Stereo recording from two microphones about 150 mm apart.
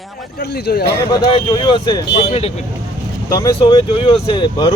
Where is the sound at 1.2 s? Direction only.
30° left (ahead or behind).